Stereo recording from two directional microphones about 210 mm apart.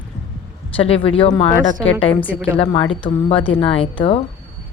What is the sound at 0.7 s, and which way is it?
Speech, 25° left (ahead or behind).